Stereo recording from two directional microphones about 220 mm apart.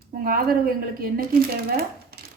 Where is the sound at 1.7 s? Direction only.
45° right (ahead or behind).